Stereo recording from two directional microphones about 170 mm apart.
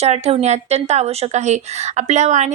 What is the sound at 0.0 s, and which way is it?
Speech, 40° right (ahead or behind).